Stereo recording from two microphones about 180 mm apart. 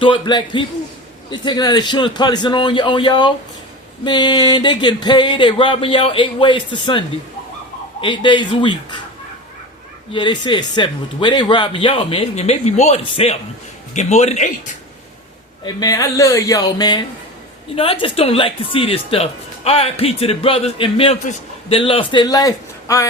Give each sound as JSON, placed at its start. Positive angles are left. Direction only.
{"t": 0.0, "sound": "speech", "side_deg": 25}
{"t": 8.0, "sound": "speech", "side_deg": 25}
{"t": 10.1, "sound": "speech", "side_deg": 25}
{"t": 15.6, "sound": "speech", "side_deg": 20}